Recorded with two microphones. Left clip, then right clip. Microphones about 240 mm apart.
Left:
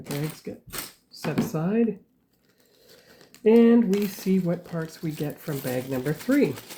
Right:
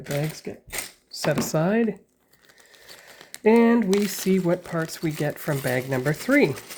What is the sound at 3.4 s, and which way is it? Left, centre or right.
Speech, right.